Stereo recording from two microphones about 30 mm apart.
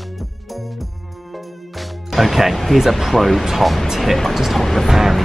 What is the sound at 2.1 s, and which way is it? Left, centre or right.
Speech, centre.